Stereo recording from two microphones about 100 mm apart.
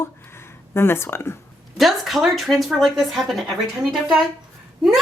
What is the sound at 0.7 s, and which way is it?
Speech, 25° left (ahead or behind).